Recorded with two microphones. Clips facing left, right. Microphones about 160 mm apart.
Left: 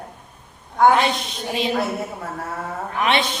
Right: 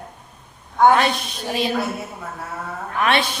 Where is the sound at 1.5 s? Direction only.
20° left (ahead or behind).